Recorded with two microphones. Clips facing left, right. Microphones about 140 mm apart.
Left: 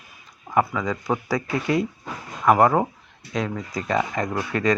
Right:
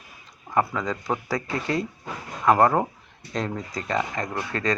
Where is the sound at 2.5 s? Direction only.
10° left (ahead or behind).